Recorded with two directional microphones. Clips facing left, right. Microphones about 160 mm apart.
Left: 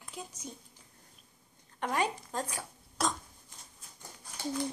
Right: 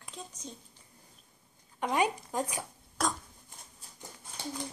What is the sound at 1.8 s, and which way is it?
Speech, 10° right (ahead or behind).